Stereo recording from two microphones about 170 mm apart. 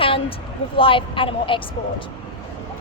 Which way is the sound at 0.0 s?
30° left (ahead or behind).